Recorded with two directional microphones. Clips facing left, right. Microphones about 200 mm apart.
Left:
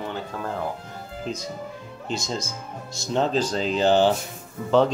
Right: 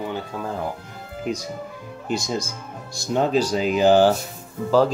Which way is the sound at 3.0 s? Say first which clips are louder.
Right 3 dB; 10° right (ahead or behind).